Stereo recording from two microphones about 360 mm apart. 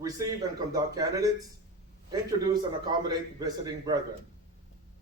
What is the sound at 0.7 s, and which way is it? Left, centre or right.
Speech, centre.